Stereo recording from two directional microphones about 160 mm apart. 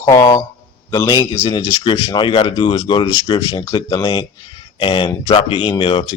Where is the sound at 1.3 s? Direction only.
30° left (ahead or behind).